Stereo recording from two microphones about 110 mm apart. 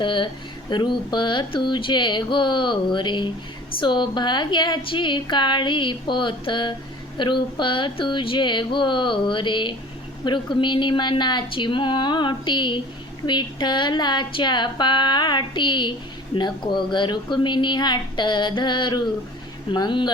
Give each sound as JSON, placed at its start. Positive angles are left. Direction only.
{"t": 0.0, "sound": "speech", "side_deg": 45}